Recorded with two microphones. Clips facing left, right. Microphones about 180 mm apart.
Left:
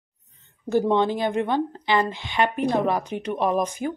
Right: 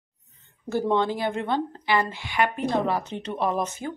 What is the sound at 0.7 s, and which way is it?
A woman's voice, 15° left (ahead or behind).